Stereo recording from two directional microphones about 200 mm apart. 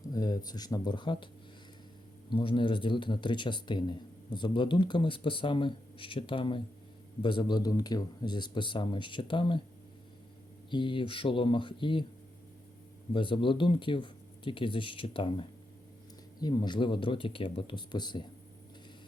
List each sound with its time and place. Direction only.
0.1 s speech: 20° left (ahead or behind)
2.3 s speech: 25° left (ahead or behind)
10.7 s speech: 25° left (ahead or behind)
13.1 s speech: 25° left (ahead or behind)